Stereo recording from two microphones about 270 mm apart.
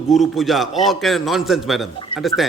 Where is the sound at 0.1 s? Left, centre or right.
Centre.